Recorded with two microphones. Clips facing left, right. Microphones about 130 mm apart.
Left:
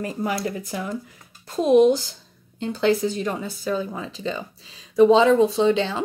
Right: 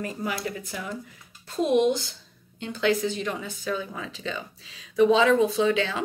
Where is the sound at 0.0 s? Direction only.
40° left (ahead or behind).